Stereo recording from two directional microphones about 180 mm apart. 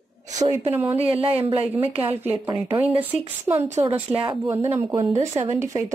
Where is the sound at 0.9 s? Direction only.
35° right (ahead or behind).